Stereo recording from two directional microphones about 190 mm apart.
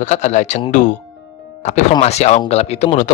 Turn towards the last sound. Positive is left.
turn(degrees=35)  # may be behind; listen again after turning